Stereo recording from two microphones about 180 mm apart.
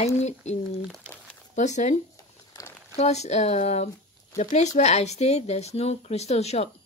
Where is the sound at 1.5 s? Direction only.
40° left (ahead or behind).